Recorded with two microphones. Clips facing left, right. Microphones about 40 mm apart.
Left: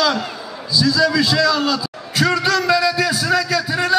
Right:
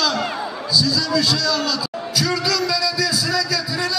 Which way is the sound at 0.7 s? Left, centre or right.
Left.